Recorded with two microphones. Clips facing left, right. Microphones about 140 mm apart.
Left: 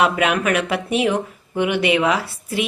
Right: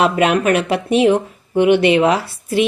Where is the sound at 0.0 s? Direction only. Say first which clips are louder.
Right 4 dB; 30° right (ahead or behind).